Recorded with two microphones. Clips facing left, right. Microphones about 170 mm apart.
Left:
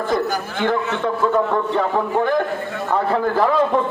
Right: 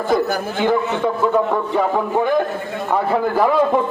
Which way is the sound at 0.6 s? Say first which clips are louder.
Right 2 dB; 10° right (ahead or behind).